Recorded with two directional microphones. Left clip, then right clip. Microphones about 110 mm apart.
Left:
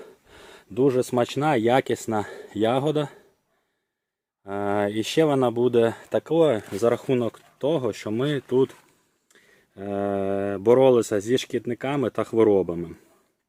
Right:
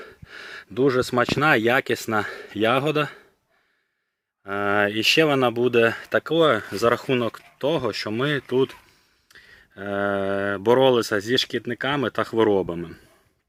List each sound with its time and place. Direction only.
0.0 s gasp: 25° left (ahead or behind)
1.5 s speech: 15° left (ahead or behind)
4.4 s speech: 25° left (ahead or behind)
9.3 s a sound: 35° left (ahead or behind)
9.7 s speech: 20° left (ahead or behind)